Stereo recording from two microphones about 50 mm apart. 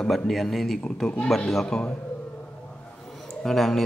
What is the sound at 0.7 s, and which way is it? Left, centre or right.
A man's voice, centre.